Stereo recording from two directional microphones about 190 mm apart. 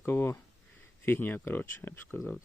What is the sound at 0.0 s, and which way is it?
Speech, 10° left (ahead or behind).